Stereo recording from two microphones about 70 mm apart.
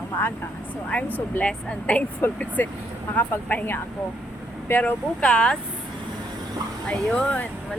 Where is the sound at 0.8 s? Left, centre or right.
Centre.